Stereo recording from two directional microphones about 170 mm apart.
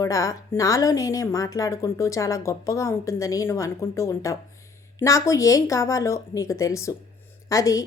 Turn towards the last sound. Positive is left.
turn(degrees=20)  # may be behind; listen again after turning